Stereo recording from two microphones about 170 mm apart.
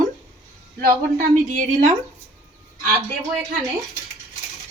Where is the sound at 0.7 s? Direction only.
60° right (ahead or behind).